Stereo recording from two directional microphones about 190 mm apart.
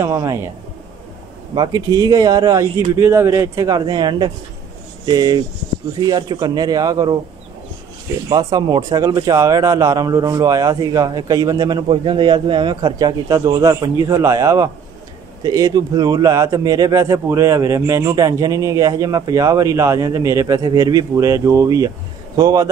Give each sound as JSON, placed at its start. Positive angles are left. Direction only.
{"t": 0.0, "sound": "speech", "side_deg": -15}
{"t": 1.5, "sound": "speech", "side_deg": -20}
{"t": 8.3, "sound": "speech", "side_deg": -20}